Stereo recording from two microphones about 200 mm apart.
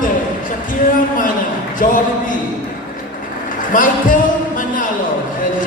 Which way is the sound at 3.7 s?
40° left (ahead or behind).